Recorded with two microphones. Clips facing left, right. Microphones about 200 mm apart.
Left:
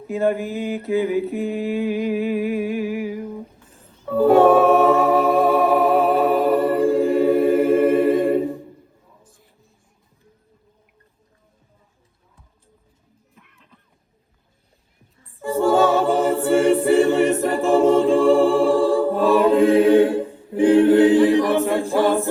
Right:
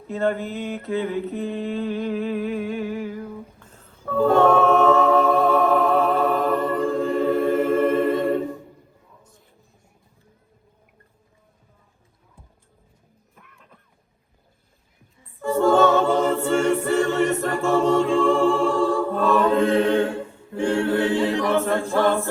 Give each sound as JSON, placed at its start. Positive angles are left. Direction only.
{"t": 0.1, "sound": "mantra", "side_deg": 15}
{"t": 4.1, "sound": "a capella", "side_deg": 15}
{"t": 13.3, "sound": "a sound", "side_deg": -50}
{"t": 15.4, "sound": "a capella", "side_deg": 15}
{"t": 18.8, "sound": "choir", "side_deg": 30}
{"t": 19.0, "sound": "a capella", "side_deg": 15}